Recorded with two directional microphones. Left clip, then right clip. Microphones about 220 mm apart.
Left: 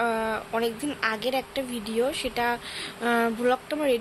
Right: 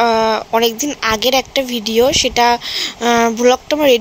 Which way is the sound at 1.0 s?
30° right (ahead or behind).